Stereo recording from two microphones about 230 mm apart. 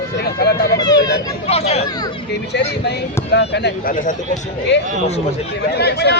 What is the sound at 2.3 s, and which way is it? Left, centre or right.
Speech, left.